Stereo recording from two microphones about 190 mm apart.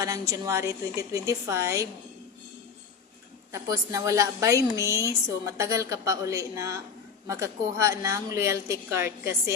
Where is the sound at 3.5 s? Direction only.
15° right (ahead or behind).